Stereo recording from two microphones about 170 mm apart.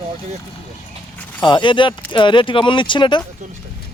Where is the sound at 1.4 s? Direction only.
30° left (ahead or behind).